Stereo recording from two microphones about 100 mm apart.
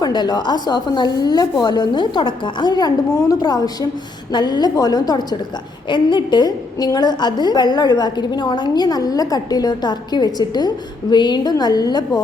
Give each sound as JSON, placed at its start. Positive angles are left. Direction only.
{"t": 0.0, "sound": "a woman's voice", "side_deg": 45}